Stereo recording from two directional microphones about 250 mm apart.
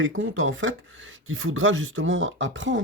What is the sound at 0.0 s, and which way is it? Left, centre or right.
Speech, right.